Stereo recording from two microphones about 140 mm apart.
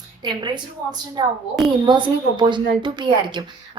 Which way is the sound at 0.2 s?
35° right (ahead or behind).